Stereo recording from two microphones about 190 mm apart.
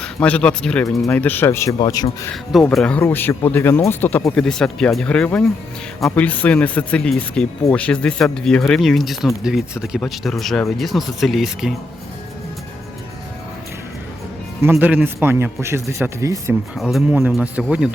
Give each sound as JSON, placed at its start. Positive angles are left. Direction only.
{"t": 0.0, "sound": "a man's voice", "side_deg": 5}
{"t": 2.3, "sound": "speech", "side_deg": 0}
{"t": 14.6, "sound": "a man's voice", "side_deg": -10}
{"t": 16.7, "sound": "speech", "side_deg": -5}